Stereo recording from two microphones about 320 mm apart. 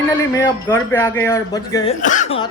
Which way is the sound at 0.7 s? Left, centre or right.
Centre.